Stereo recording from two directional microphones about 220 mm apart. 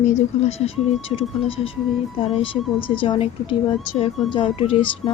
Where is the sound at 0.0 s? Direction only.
30° left (ahead or behind).